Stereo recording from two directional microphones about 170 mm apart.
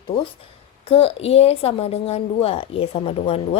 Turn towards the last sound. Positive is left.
turn(degrees=35)  # may be behind; listen again after turning